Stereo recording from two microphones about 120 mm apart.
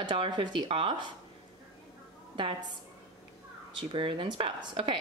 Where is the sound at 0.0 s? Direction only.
40° right (ahead or behind).